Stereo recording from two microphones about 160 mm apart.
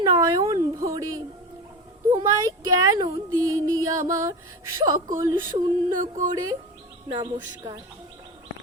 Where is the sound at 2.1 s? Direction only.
20° right (ahead or behind).